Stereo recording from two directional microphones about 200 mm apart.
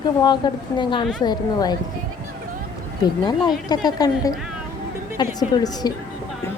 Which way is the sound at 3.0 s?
20° left (ahead or behind).